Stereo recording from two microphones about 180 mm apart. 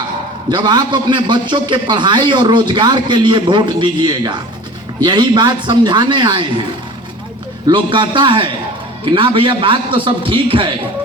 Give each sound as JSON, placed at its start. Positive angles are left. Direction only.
{"t": 0.5, "sound": "a man's voice", "side_deg": -25}
{"t": 7.7, "sound": "a man's voice", "side_deg": -25}